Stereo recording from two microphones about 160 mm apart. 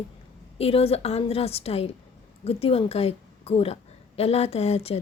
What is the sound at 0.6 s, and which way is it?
A woman's voice, 35° left (ahead or behind).